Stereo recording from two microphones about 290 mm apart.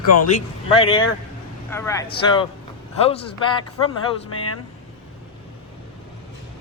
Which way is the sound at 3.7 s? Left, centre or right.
Left.